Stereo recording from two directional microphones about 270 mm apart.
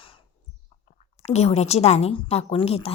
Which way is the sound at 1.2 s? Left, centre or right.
Left.